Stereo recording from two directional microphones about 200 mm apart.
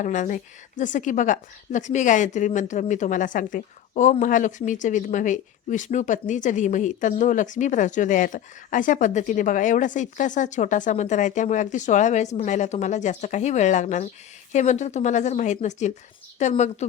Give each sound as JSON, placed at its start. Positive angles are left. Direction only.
{"t": 0.0, "sound": "speech", "side_deg": 40}